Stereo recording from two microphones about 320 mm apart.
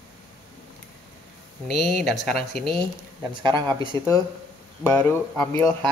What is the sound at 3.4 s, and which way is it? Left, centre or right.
Speech, centre.